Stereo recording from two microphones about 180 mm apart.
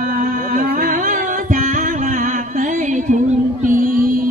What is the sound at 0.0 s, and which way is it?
Music, 50° right (ahead or behind).